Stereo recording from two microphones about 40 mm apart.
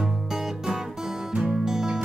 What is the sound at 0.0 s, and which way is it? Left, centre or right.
Music, centre.